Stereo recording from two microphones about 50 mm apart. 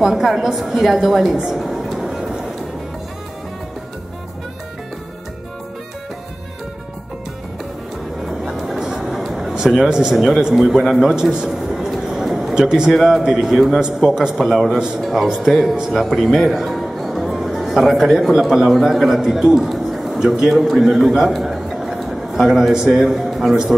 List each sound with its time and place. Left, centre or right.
0.0 s a woman's voice: centre
8.3 s vehicle: centre
9.8 s a man's voice: centre
10.1 s a man's voice: centre
11.1 s a sound: centre
12.6 s a man's voice: centre
12.9 s a man's voice: centre
13.7 s a man's voice: centre